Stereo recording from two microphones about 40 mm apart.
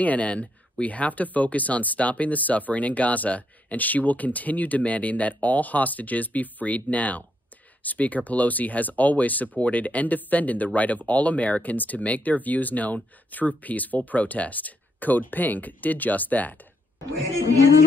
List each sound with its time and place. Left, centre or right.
0.0 s speech: left